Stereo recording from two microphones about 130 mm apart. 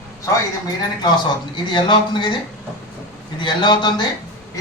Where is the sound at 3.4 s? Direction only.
35° left (ahead or behind).